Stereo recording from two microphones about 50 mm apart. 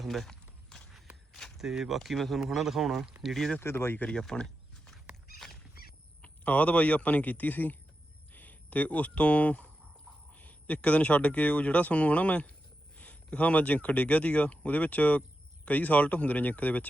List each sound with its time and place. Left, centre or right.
0.0 s walk: centre
1.3 s a sound: centre
1.5 s speech: centre
2.0 s a man's voice: centre
3.6 s speech: left
4.1 s a sound: centre
6.2 s speech: left